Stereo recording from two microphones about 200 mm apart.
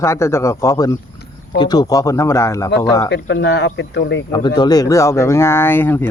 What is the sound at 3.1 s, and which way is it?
Speech, 60° left (ahead or behind).